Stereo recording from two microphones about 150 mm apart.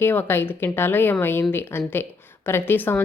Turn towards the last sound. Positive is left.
turn(degrees=15)  # may be behind; listen again after turning